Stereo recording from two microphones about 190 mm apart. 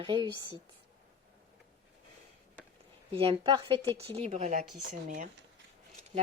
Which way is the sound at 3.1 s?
30° right (ahead or behind).